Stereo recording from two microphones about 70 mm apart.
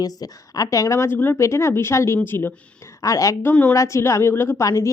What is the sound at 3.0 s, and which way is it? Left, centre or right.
Speech, left.